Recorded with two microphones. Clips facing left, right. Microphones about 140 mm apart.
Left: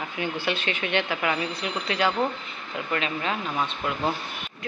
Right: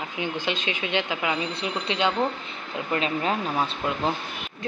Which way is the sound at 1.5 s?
25° right (ahead or behind).